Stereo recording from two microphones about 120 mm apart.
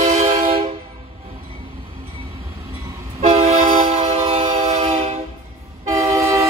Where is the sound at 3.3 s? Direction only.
60° right (ahead or behind).